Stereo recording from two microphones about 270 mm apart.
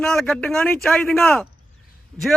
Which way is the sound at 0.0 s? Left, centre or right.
Centre.